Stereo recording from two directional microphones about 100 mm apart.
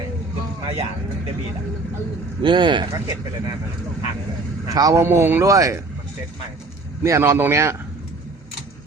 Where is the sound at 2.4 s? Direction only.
50° right (ahead or behind).